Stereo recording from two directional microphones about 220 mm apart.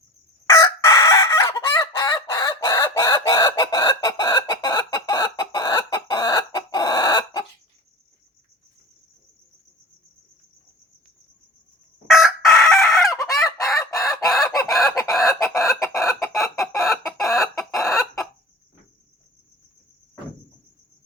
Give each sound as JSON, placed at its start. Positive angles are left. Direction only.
{"t": 0.5, "sound": "chicken", "side_deg": 15}
{"t": 12.0, "sound": "chicken", "side_deg": 0}
{"t": 13.3, "sound": "fowl", "side_deg": 0}
{"t": 14.7, "sound": "chicken", "side_deg": 0}
{"t": 15.5, "sound": "chicken", "side_deg": 15}
{"t": 16.8, "sound": "chicken", "side_deg": 0}